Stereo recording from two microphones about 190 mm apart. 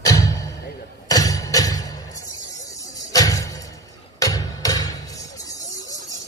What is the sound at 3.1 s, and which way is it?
Music, 20° left (ahead or behind).